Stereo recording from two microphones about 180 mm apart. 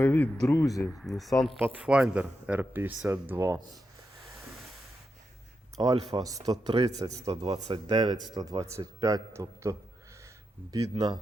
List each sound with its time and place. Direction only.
0.0 s speech: 10° left (ahead or behind)
0.9 s speech: centre (ahead or behind)
5.8 s speech: 25° right (ahead or behind)